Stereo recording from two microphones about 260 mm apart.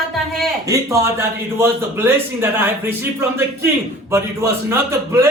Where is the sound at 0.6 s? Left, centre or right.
Centre.